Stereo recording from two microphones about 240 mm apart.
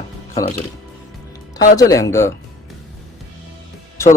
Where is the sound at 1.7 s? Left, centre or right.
Centre.